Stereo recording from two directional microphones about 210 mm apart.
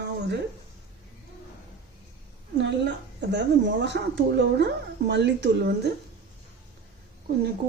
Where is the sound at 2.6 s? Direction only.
55° right (ahead or behind).